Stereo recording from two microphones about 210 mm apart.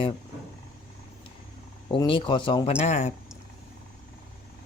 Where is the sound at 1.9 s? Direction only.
25° left (ahead or behind).